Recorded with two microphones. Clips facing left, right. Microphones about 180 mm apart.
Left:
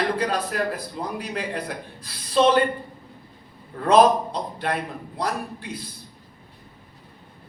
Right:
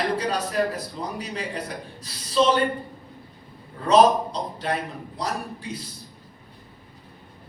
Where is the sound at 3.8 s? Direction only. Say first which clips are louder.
Left 1 dB; 55° left (ahead or behind).